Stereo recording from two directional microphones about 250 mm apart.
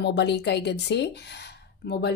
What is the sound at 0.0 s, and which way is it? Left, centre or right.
Speech, left.